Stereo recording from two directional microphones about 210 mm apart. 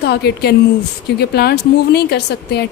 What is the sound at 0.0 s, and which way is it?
A woman's voice, 50° left (ahead or behind).